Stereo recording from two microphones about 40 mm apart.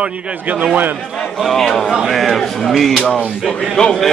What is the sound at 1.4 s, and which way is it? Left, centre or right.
A man's voice, centre.